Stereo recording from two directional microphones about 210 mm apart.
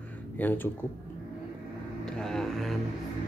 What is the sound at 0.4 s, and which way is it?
Speech, 10° left (ahead or behind).